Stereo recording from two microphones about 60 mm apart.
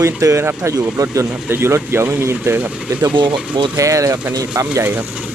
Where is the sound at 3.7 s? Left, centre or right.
Right.